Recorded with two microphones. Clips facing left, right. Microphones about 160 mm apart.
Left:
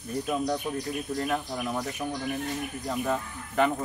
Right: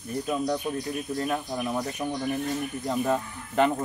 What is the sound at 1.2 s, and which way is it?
Speech, 10° right (ahead or behind).